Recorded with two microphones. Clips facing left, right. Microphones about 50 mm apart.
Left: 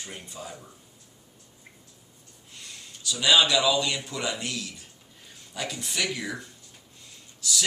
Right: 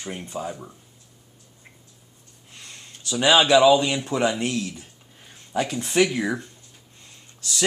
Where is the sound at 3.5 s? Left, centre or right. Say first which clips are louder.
Right 9 dB; right.